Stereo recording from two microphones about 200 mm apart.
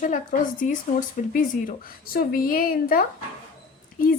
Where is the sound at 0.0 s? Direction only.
40° left (ahead or behind).